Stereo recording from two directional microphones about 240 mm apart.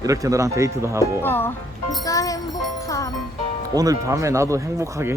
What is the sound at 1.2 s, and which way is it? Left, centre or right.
Speech, centre.